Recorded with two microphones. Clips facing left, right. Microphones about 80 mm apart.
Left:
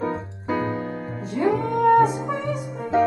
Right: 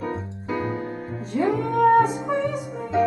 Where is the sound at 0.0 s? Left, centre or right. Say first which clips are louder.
Left 3 dB; left.